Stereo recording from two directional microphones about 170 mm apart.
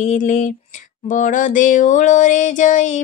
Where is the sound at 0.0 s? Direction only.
45° left (ahead or behind).